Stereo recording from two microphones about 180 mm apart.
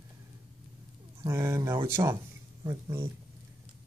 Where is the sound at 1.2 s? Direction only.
15° right (ahead or behind).